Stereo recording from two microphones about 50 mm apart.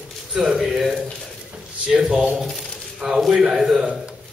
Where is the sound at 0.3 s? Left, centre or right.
Centre.